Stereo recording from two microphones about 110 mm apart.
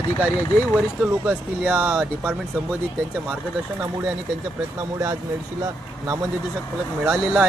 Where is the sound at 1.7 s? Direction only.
20° right (ahead or behind).